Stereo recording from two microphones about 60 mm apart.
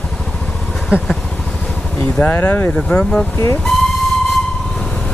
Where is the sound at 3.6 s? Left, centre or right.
Centre.